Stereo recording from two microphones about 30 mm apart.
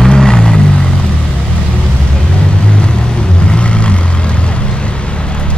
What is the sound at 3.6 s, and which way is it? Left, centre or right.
Vehicle, left.